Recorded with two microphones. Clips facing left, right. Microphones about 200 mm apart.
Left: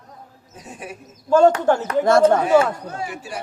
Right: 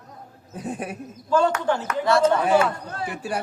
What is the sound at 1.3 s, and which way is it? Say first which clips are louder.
A man's voice: left 6 dB; 45° left (ahead or behind).